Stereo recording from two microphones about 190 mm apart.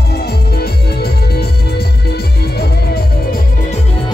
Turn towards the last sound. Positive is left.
turn(degrees=55)  # may be behind; listen again after turning